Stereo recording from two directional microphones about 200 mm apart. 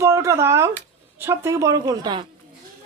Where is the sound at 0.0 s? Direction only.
15° right (ahead or behind).